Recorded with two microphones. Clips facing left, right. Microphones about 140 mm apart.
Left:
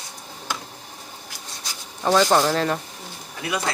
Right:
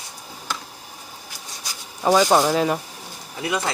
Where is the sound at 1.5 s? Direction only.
10° right (ahead or behind).